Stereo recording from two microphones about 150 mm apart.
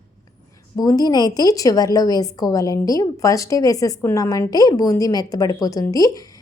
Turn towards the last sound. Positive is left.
turn(degrees=25)  # may be behind; listen again after turning